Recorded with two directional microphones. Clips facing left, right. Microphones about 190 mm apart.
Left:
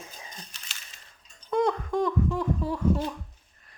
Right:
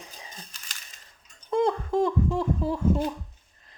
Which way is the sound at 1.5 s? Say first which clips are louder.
Right 1 dB; 25° right (ahead or behind).